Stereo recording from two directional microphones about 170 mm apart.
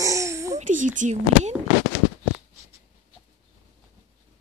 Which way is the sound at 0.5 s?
50° right (ahead or behind).